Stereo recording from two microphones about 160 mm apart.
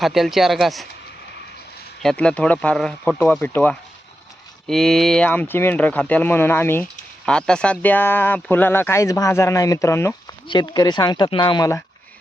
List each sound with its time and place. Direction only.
0.0 s speech: centre (ahead or behind)
2.0 s speech: 5° left (ahead or behind)
10.5 s speech: 25° left (ahead or behind)